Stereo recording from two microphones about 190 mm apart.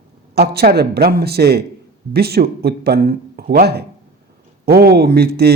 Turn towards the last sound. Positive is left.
turn(degrees=-55)  # may be behind; listen again after turning